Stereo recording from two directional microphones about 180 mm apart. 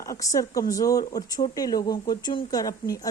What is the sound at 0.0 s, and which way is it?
A woman's voice, 20° left (ahead or behind).